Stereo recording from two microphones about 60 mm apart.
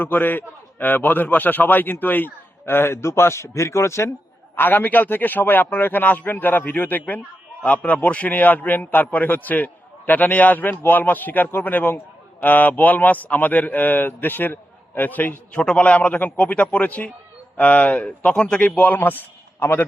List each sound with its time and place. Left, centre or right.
0.0 s a man's voice: left
4.5 s a man's voice: left
15.6 s a man's voice: centre; by 19.8 s left